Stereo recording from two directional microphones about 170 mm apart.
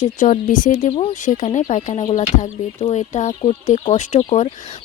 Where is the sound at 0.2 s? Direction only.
50° left (ahead or behind).